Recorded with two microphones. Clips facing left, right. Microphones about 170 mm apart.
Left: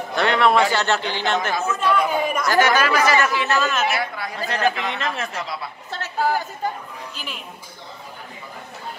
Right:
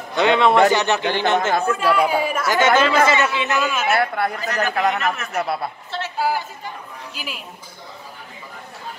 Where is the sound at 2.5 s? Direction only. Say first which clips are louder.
Right 2 dB; 25° right (ahead or behind).